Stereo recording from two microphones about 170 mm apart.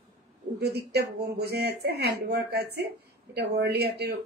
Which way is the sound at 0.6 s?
70° right (ahead or behind).